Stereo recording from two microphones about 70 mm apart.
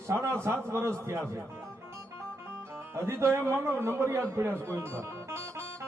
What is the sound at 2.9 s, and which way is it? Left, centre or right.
Speech, right.